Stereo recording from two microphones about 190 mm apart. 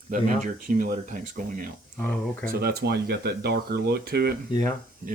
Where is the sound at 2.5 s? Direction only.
55° right (ahead or behind).